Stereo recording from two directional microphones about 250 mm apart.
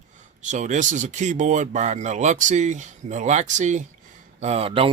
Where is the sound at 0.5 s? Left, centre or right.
Right.